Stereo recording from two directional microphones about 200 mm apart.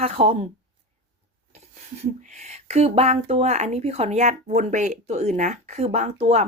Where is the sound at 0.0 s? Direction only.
35° right (ahead or behind).